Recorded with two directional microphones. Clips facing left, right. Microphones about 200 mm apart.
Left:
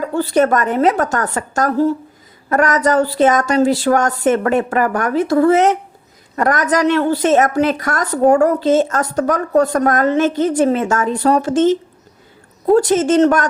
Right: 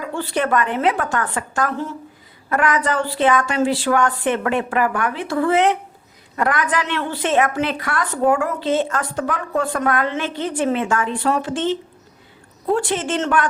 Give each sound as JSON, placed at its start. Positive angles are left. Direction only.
{"t": 0.0, "sound": "a woman's voice", "side_deg": 40}